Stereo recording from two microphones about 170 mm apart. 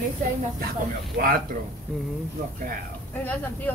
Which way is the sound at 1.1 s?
55° right (ahead or behind).